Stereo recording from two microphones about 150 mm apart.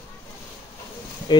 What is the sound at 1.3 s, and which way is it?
Speech, 30° left (ahead or behind).